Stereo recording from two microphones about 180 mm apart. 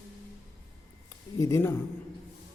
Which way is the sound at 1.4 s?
15° left (ahead or behind).